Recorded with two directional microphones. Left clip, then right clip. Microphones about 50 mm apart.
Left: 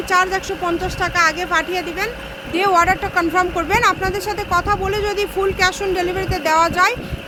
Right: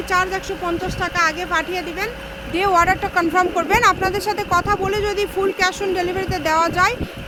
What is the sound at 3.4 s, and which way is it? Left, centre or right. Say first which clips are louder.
Speech: right 1 dB; right.